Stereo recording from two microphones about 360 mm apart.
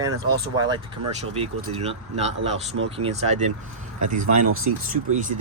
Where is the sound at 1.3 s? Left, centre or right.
Centre.